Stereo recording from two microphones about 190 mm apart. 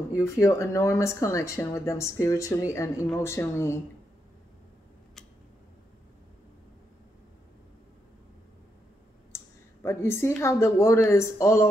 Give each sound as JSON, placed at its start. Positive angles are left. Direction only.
{"t": 0.1, "sound": "speech", "side_deg": 15}
{"t": 9.8, "sound": "speech", "side_deg": 15}